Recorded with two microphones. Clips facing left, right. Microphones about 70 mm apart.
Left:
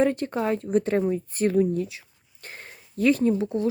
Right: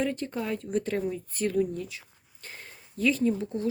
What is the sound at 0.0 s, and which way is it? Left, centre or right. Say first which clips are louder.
Speech: left 7 dB; left.